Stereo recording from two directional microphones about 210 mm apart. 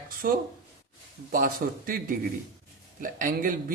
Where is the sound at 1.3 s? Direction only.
40° right (ahead or behind).